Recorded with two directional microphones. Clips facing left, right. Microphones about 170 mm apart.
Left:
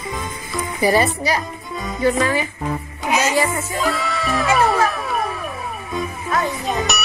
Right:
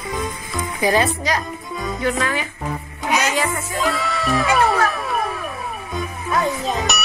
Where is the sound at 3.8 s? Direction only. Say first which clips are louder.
Even; centre (ahead or behind).